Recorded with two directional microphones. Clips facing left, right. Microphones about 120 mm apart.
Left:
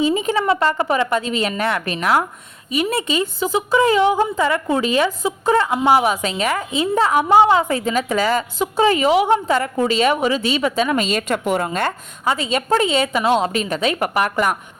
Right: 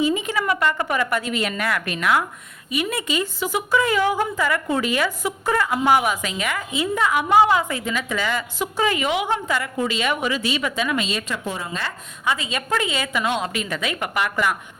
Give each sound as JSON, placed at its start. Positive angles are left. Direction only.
{"t": 0.0, "sound": "a woman's voice", "side_deg": 30}
{"t": 12.2, "sound": "a woman's voice", "side_deg": 30}